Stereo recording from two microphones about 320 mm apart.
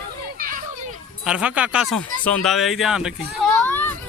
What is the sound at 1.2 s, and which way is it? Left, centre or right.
Speech, centre.